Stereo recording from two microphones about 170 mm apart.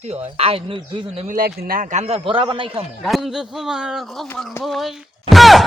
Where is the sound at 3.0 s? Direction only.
Centre (ahead or behind).